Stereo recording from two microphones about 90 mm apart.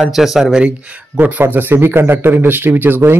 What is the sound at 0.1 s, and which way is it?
Speech, centre (ahead or behind).